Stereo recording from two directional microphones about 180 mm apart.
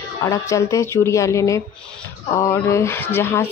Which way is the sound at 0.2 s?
20° left (ahead or behind).